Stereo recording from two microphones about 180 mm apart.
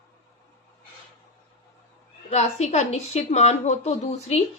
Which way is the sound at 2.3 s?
35° left (ahead or behind).